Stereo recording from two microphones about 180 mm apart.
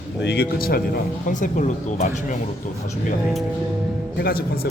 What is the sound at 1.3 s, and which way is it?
Speech, 45° left (ahead or behind).